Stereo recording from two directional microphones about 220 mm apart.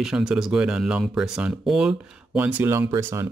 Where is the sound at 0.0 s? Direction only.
Centre (ahead or behind).